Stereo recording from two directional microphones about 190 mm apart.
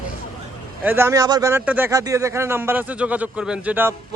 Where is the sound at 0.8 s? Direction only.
15° right (ahead or behind).